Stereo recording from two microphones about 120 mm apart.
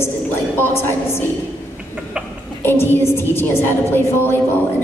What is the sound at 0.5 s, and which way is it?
Speech, 20° left (ahead or behind).